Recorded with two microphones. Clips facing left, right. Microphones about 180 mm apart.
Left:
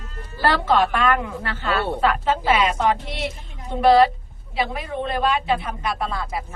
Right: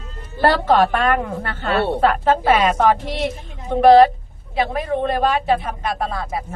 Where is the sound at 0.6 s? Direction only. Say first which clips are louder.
Right 3 dB; 45° right (ahead or behind).